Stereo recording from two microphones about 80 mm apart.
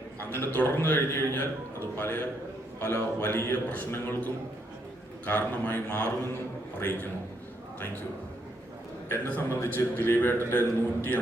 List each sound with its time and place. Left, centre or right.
0.3 s a man's voice: left
9.0 s a man's voice: left